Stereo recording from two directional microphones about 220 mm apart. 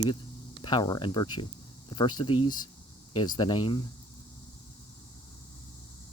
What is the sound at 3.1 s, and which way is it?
Speech, 20° left (ahead or behind).